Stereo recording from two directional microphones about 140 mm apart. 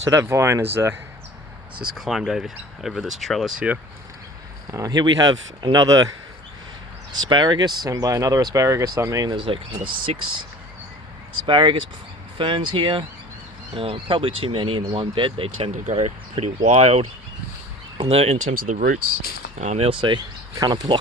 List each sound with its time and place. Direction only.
0.0 s speech: 20° right (ahead or behind)
2.0 s speech: 5° right (ahead or behind)
4.7 s speech: 25° right (ahead or behind)
11.4 s speech: 35° right (ahead or behind)
15.7 s speech: 55° right (ahead or behind)
18.4 s speech: 80° right
19.5 s speech: 55° right (ahead or behind)
19.9 s speech: 35° right (ahead or behind)